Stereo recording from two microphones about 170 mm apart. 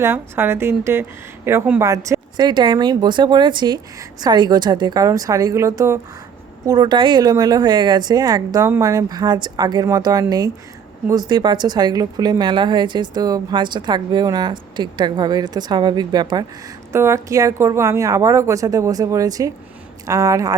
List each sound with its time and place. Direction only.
0.0 s a woman's voice: 15° right (ahead or behind)